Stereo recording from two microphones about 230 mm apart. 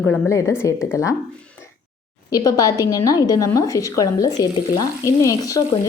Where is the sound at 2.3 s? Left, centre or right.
Centre.